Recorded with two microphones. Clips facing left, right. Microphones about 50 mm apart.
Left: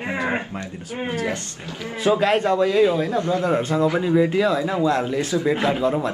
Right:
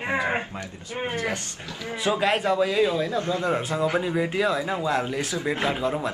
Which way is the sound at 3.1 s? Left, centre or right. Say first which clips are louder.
Left 4 dB; left.